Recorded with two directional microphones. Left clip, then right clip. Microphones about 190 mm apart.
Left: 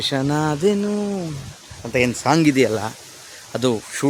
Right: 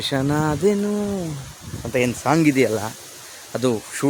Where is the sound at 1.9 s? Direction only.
5° left (ahead or behind).